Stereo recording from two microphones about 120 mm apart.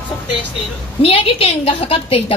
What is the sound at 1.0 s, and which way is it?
A woman's voice, 55° left (ahead or behind).